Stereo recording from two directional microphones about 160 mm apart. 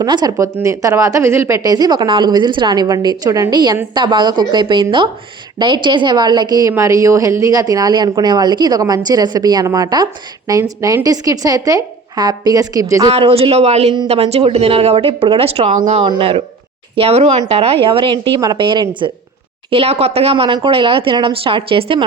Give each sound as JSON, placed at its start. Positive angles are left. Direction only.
{"t": 0.0, "sound": "a woman's voice", "side_deg": -25}
{"t": 13.1, "sound": "a woman's voice", "side_deg": -40}